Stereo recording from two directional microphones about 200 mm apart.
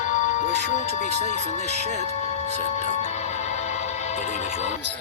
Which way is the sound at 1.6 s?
35° right (ahead or behind).